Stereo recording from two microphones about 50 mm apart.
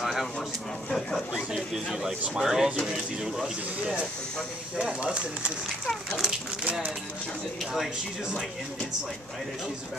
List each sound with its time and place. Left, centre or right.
0.0 s a sound: centre
0.8 s speech: centre
1.5 s speech: centre
4.8 s speech: right
5.7 s speech: centre
6.6 s speech: right